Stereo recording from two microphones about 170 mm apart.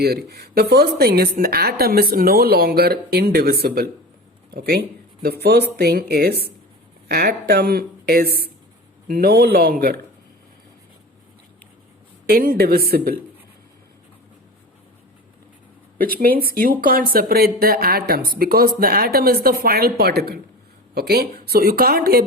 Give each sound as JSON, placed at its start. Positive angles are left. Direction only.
{"t": 0.0, "sound": "a woman's voice", "side_deg": -70}
{"t": 12.2, "sound": "a woman's voice", "side_deg": -60}
{"t": 16.0, "sound": "a woman's voice", "side_deg": -60}